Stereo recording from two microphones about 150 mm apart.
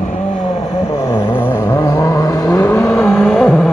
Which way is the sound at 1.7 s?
20° left (ahead or behind).